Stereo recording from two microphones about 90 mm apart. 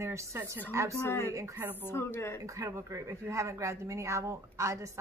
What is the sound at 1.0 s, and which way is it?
Speech, 30° left (ahead or behind).